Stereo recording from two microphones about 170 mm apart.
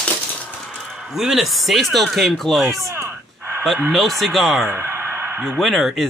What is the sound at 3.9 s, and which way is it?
Speech, centre (ahead or behind).